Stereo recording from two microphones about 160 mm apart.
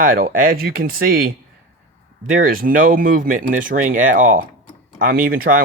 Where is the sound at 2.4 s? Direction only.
60° right (ahead or behind).